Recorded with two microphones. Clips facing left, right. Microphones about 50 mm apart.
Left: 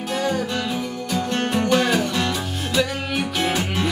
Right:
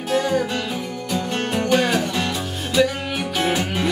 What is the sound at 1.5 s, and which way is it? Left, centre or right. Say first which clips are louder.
Music: right 1 dB; centre.